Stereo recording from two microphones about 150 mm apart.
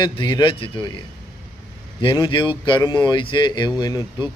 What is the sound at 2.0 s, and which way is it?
Speech, 35° left (ahead or behind).